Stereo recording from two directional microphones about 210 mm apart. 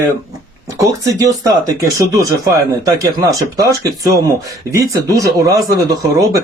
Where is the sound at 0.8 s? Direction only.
15° right (ahead or behind).